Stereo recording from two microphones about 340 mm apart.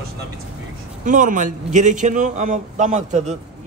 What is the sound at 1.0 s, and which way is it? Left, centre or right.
A man's voice, right.